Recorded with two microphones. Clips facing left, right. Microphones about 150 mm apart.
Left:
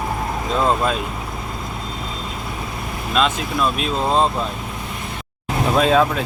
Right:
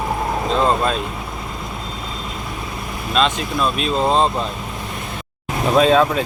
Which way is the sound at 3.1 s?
5° left (ahead or behind).